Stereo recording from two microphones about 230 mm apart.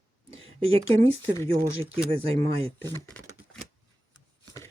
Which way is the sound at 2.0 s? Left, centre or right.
Right.